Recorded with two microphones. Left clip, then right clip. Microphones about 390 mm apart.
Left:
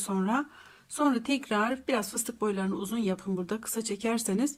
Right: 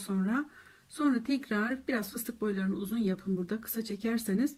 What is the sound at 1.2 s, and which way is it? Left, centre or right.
Speech, centre.